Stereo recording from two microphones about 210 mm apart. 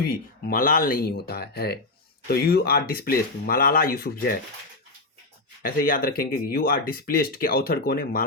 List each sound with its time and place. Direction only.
0.1 s speech: 40° left (ahead or behind)
5.6 s speech: 45° left (ahead or behind)